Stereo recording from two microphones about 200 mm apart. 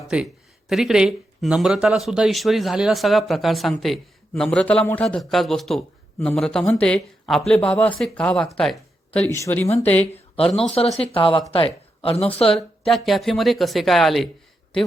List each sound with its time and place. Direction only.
0.7 s speech: centre (ahead or behind)
10.7 s speech: 30° left (ahead or behind)
12.5 s speech: centre (ahead or behind)